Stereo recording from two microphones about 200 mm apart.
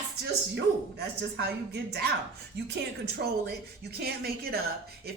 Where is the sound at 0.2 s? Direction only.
55° right (ahead or behind).